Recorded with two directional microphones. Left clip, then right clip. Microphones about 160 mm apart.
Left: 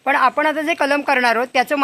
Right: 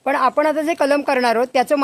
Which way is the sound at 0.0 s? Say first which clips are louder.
Left 1 dB; 85° right.